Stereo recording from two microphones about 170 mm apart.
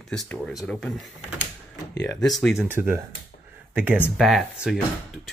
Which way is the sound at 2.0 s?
5° left (ahead or behind).